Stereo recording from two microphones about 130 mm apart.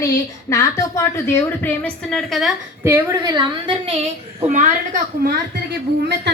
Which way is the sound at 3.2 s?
30° right (ahead or behind).